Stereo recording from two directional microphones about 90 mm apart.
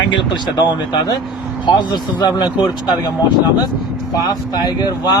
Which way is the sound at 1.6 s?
60° left (ahead or behind).